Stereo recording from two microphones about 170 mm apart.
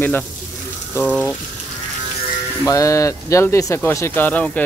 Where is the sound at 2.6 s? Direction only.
20° left (ahead or behind).